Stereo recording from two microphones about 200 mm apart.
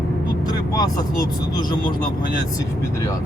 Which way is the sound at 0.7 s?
20° left (ahead or behind).